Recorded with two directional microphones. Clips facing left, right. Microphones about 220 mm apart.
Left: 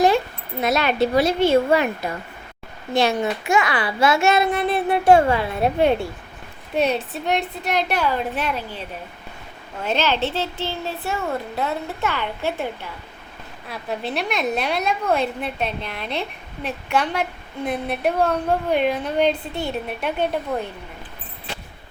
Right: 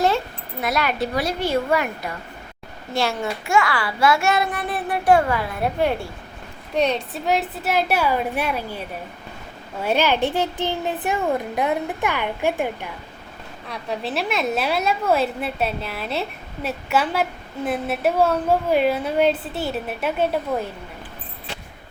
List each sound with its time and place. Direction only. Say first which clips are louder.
0.6 s a child's voice: left 4 dB; 25° left (ahead or behind)
6.7 s a woman's voice: even; 5° left (ahead or behind); by 8.8 s 10° right (ahead or behind)
9.8 s a child's voice: right 2 dB; 10° right (ahead or behind)
13.7 s a woman's voice: even; centre (ahead or behind)